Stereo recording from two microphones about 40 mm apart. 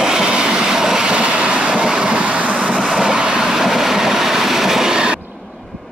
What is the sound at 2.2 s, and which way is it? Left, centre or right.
Vehicle, right.